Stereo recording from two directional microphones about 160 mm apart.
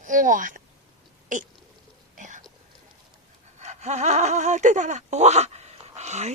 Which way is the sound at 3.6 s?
45° right (ahead or behind).